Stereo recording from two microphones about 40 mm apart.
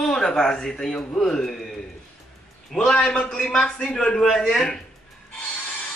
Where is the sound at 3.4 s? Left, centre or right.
Centre.